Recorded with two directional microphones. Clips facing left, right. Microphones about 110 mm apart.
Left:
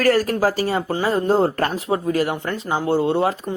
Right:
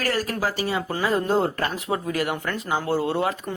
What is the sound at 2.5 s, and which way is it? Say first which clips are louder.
Speech: left 4 dB; 20° left (ahead or behind).